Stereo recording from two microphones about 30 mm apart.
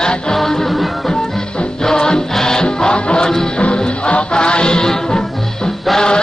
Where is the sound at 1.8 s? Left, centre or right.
Left.